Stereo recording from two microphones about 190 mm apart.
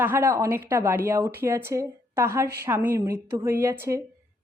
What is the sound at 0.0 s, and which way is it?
A woman's voice, 15° right (ahead or behind).